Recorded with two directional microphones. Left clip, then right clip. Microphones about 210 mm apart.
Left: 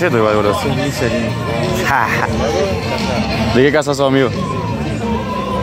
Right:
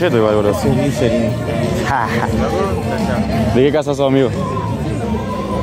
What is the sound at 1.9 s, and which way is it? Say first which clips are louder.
Speech: left 4 dB; 5° right (ahead or behind).